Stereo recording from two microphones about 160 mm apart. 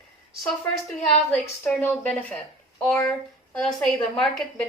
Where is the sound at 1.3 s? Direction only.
10° left (ahead or behind).